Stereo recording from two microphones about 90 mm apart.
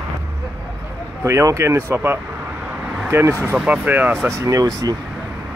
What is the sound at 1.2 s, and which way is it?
Speech, 35° right (ahead or behind).